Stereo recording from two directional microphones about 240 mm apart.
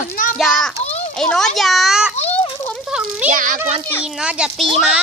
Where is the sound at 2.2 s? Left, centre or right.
Left.